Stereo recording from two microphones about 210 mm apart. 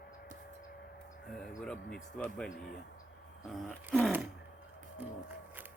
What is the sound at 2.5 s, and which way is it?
Speech, 45° left (ahead or behind).